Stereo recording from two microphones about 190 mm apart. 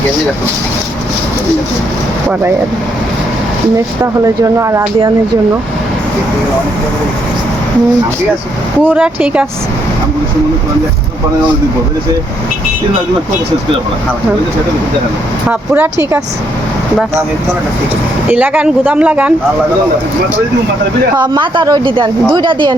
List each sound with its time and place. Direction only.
3.8 s speech: 15° right (ahead or behind)
8.8 s speech: 10° right (ahead or behind)
15.4 s speech: 10° right (ahead or behind)
18.3 s speech: 10° right (ahead or behind)
21.2 s a woman's voice: 25° right (ahead or behind)